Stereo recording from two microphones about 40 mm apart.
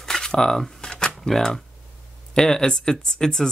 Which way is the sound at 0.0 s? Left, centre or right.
Centre.